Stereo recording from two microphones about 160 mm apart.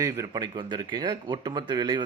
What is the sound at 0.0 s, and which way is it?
A man's voice, 25° right (ahead or behind).